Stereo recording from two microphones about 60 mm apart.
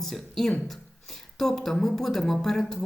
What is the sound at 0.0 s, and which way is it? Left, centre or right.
A woman's voice, centre.